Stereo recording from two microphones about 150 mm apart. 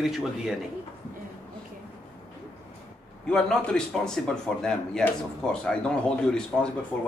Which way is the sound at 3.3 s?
5° left (ahead or behind).